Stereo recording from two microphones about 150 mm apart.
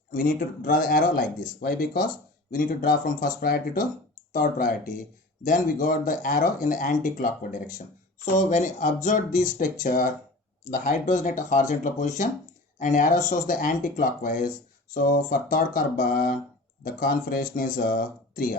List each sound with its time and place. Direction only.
0.1 s speech: 70° left (ahead or behind)
4.3 s speech: 65° left (ahead or behind)
10.7 s speech: 55° left (ahead or behind)